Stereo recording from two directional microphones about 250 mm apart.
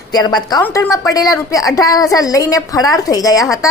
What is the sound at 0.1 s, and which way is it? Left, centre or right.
A woman's voice, centre.